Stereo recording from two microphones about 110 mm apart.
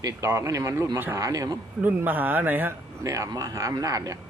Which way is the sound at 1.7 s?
15° right (ahead or behind).